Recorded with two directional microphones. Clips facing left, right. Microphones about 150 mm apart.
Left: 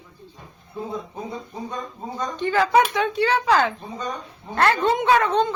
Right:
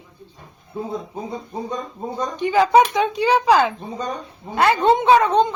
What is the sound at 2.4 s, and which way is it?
A woman's voice, 15° right (ahead or behind).